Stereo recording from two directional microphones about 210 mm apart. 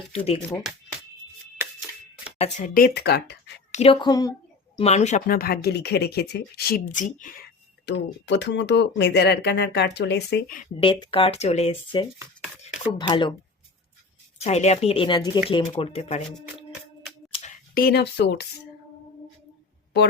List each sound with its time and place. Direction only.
0.1 s speech: 30° left (ahead or behind)
2.4 s speech: 35° left (ahead or behind); by 3.5 s 50° left (ahead or behind)
3.7 s a sound: 30° left (ahead or behind)
3.9 s speech: 15° left (ahead or behind)
4.8 s speech: 30° left (ahead or behind)
5.4 s speech: 50° left (ahead or behind)
7.9 s speech: 55° left (ahead or behind)
10.6 s speech: 25° left (ahead or behind)
14.3 s speech: 30° left (ahead or behind)
17.7 s speech: 50° left (ahead or behind)